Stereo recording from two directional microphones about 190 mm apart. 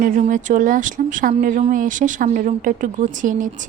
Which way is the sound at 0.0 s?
45° right (ahead or behind).